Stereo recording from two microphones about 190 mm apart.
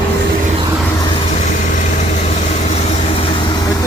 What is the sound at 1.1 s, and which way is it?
Vehicle, 35° left (ahead or behind).